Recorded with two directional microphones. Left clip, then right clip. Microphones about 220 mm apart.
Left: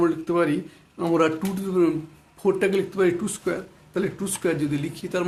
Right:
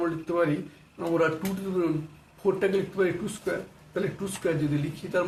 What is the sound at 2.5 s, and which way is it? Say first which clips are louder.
Speech: left 3 dB; 45° left (ahead or behind).